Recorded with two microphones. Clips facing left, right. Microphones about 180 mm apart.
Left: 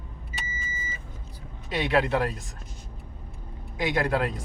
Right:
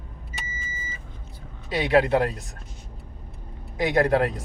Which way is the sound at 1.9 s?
45° right (ahead or behind).